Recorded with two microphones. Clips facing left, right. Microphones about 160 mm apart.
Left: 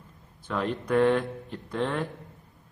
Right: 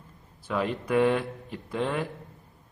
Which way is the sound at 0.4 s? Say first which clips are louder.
Right 1 dB; 5° right (ahead or behind).